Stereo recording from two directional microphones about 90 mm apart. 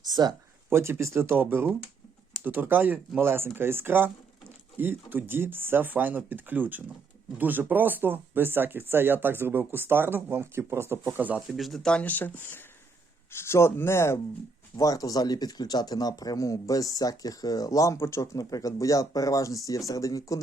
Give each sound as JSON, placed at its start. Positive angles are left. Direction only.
{"t": 0.0, "sound": "speech", "side_deg": -45}
{"t": 0.7, "sound": "speech", "side_deg": -30}
{"t": 11.0, "sound": "speech", "side_deg": -15}
{"t": 11.3, "sound": "speech", "side_deg": 0}
{"t": 14.8, "sound": "speech", "side_deg": 40}